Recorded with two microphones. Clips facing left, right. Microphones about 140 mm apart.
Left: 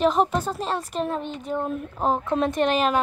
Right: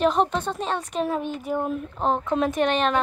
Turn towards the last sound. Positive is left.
turn(degrees=5)  # may be behind; listen again after turning